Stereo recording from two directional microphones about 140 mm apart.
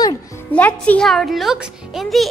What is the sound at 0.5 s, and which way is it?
A woman's voice, 10° left (ahead or behind).